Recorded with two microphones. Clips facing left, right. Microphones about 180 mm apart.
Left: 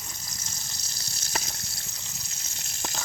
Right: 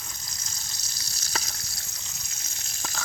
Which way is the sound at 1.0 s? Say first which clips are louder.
Left 1 dB; 25° left (ahead or behind).